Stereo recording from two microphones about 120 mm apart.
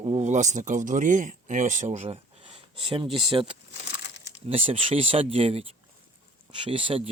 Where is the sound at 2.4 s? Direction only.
50° right (ahead or behind).